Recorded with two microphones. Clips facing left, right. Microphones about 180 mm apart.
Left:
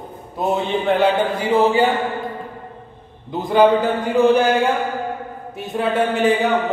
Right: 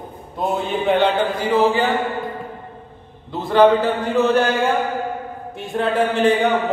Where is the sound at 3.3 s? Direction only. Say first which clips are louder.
Left 1 dB; 15° left (ahead or behind).